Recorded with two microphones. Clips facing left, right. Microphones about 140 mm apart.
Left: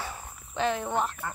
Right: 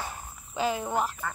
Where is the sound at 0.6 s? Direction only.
5° right (ahead or behind).